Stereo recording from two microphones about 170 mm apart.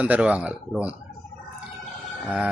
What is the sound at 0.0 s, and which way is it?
Speech, 10° right (ahead or behind).